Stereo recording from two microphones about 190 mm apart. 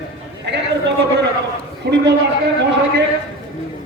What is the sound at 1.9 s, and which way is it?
Speech, 60° right (ahead or behind).